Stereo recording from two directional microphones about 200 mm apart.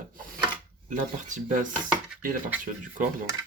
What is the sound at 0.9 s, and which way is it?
Speech, 40° right (ahead or behind).